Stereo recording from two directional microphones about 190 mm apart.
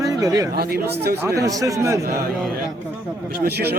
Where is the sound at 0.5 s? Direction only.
55° right (ahead or behind).